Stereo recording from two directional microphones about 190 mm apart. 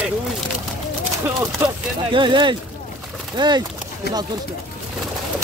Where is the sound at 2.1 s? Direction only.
25° right (ahead or behind).